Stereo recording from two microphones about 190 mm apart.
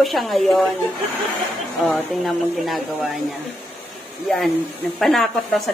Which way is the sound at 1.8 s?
Centre (ahead or behind).